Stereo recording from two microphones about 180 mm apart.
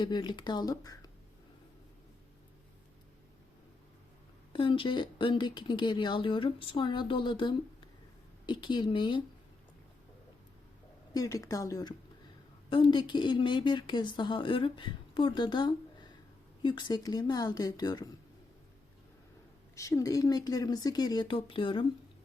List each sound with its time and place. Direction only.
0.0 s speech: 25° left (ahead or behind)
4.5 s speech: 30° left (ahead or behind)
11.1 s speech: 20° left (ahead or behind)
19.7 s speech: 15° left (ahead or behind)